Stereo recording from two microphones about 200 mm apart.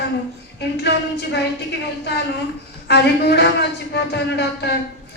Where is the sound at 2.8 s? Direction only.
55° left (ahead or behind).